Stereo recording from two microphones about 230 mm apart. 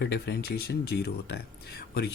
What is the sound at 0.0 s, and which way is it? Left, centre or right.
Speech, left.